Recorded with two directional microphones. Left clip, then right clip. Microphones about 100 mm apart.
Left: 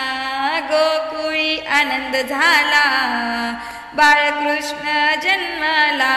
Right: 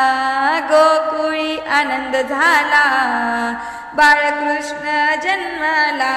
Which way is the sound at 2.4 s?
25° right (ahead or behind).